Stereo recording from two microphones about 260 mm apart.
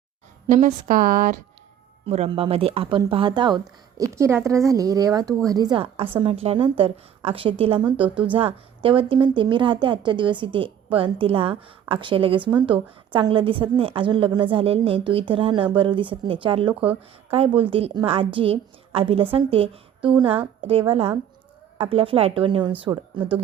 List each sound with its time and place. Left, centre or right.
0.4 s a woman's voice: right